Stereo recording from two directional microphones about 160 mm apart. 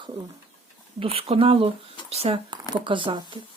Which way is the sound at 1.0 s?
35° right (ahead or behind).